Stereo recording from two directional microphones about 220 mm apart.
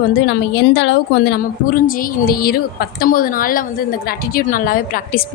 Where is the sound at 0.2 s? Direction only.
50° left (ahead or behind).